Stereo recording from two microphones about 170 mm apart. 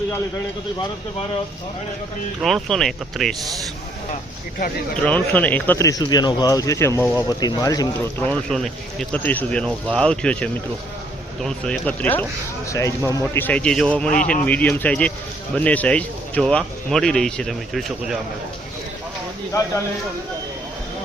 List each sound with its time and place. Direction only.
2.4 s speech: centre (ahead or behind)
4.9 s speech: 10° left (ahead or behind)
8.2 s speech: 5° left (ahead or behind)